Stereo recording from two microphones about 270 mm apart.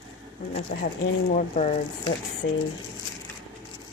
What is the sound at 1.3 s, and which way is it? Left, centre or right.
Speech, left.